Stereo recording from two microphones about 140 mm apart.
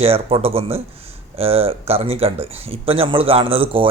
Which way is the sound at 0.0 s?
45° right (ahead or behind).